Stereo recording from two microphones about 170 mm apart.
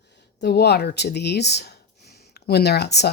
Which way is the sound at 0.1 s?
80° left.